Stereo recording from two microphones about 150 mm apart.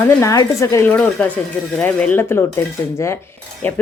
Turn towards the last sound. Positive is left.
turn(degrees=10)  # may be behind; listen again after turning